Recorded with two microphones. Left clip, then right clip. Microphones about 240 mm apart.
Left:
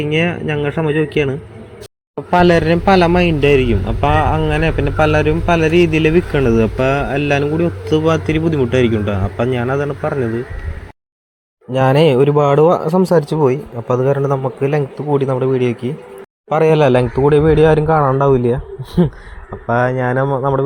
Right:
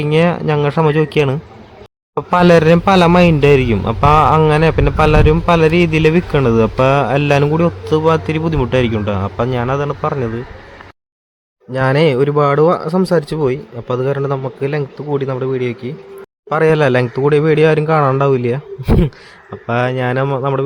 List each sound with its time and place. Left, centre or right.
0.0 s a man's voice: centre
7.9 s speech: centre
11.7 s a man's voice: centre